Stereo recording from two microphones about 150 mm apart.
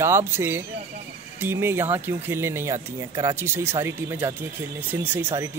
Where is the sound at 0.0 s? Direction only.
15° right (ahead or behind).